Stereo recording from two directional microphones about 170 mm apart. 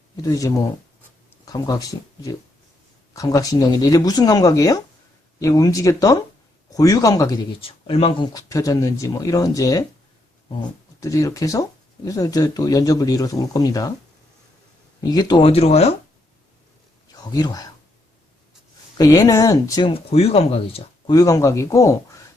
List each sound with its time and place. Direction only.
0.2 s speech: 20° left (ahead or behind)
7.6 s speech: 35° left (ahead or behind)
15.1 s speech: 25° left (ahead or behind)
17.1 s speech: 25° left (ahead or behind)
18.9 s speech: 20° left (ahead or behind)
19.9 s speech: 35° left (ahead or behind)
21.2 s speech: 20° left (ahead or behind)